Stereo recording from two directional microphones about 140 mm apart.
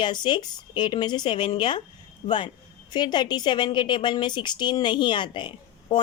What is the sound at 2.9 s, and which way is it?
A woman's voice, 30° left (ahead or behind).